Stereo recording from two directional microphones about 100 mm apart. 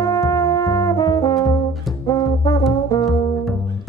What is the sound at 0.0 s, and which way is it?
Brass instrument, 30° left (ahead or behind).